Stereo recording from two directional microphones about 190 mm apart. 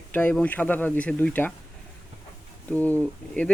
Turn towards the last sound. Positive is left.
turn(degrees=5)  # may be behind; listen again after turning